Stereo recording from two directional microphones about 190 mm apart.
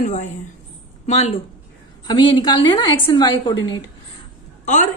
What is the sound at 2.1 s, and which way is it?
A woman's voice, 25° left (ahead or behind).